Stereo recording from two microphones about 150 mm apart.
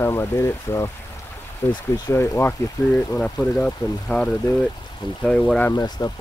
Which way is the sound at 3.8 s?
25° left (ahead or behind).